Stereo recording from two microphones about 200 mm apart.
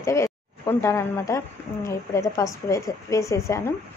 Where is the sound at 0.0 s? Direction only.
15° left (ahead or behind).